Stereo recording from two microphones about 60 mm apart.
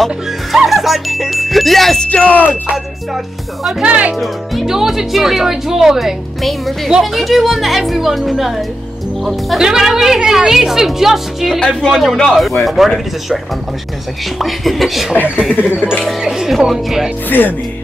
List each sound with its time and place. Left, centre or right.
0.7 s speech: centre
2.0 s speech: left
3.8 s speech: right
4.2 s a woman's voice: centre
14.4 s speech: centre
15.2 s speech: centre
15.5 s speech: left
16.0 s speech: centre
17.3 s music: left